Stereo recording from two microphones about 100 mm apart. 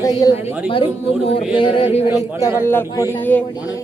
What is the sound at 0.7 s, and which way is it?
Speech, 65° left (ahead or behind).